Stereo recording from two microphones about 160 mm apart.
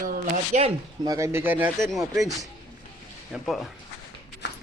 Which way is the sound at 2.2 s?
20° right (ahead or behind).